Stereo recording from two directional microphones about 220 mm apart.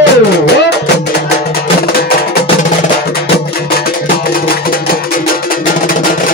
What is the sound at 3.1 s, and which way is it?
Music, 45° left (ahead or behind).